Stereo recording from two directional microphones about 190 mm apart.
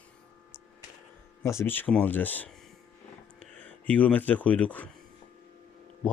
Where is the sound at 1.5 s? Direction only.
15° left (ahead or behind).